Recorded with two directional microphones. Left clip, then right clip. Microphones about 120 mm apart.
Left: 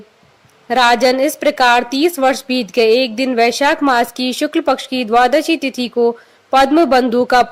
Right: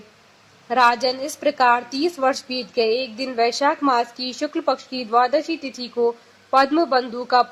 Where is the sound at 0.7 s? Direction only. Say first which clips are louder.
Left 6 dB; 30° left (ahead or behind).